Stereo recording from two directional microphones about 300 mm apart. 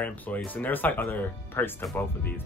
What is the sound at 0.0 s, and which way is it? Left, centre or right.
Speech, centre.